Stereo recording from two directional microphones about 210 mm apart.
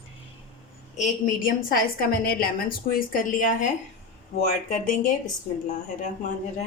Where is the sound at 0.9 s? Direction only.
40° left (ahead or behind).